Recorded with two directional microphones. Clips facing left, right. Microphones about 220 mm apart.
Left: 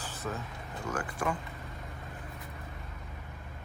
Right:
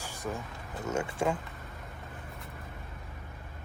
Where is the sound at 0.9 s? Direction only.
25° right (ahead or behind).